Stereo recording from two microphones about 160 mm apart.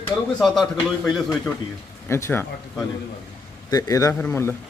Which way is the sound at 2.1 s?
15° left (ahead or behind).